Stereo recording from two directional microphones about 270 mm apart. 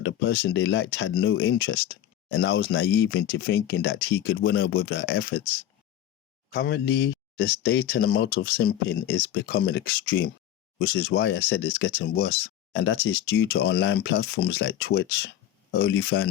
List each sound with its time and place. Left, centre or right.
0.0 s speech: left
6.5 s speech: left